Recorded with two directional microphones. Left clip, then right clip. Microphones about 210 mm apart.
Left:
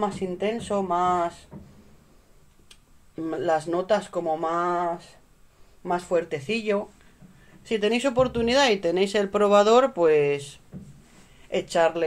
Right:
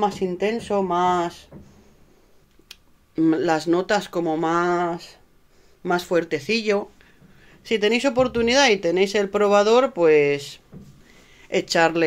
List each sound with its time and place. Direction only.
0.0 s speech: 35° right (ahead or behind)
2.7 s speech: 40° right (ahead or behind)
7.6 s speech: 20° right (ahead or behind)
11.4 s speech: 30° right (ahead or behind)